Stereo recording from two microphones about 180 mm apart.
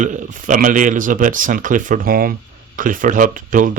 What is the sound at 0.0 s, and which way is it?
Speech, 45° right (ahead or behind).